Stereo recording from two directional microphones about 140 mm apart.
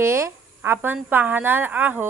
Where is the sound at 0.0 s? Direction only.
20° right (ahead or behind).